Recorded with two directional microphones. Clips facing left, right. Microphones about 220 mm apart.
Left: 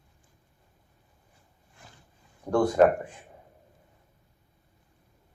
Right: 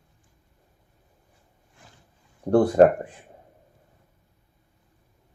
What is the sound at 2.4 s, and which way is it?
Speech, 35° right (ahead or behind).